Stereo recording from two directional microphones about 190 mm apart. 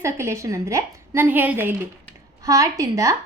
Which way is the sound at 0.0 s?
15° right (ahead or behind).